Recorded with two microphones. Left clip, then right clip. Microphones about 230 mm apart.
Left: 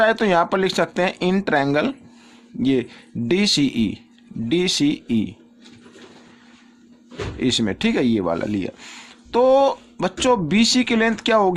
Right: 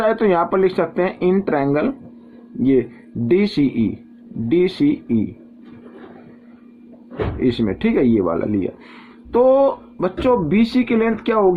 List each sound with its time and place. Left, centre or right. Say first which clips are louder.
0.0 s speech: even; left
3.2 s speech: right 2 dB; left
7.3 s speech: even; left